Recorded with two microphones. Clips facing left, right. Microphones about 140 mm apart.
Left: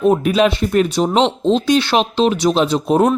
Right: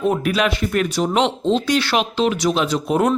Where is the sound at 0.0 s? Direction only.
20° left (ahead or behind).